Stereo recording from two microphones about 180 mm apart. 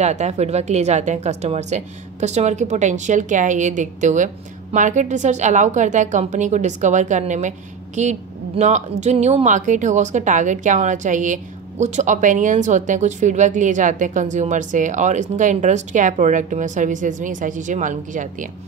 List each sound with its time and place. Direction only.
0.0 s a woman's voice: 40° right (ahead or behind)